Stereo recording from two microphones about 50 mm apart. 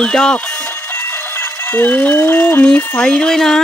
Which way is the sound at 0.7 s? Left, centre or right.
Left.